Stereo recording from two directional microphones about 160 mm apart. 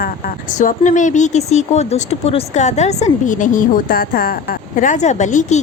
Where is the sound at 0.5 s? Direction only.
50° left (ahead or behind).